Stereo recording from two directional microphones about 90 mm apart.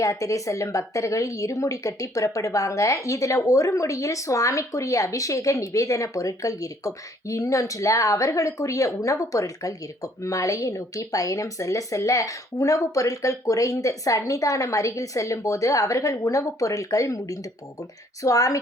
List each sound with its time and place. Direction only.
0.0 s speech: 35° left (ahead or behind)